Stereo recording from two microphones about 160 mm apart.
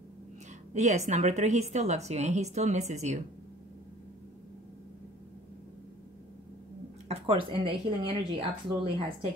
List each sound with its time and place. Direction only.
0.7 s a woman's voice: 45° right (ahead or behind)
7.1 s speech: 35° right (ahead or behind)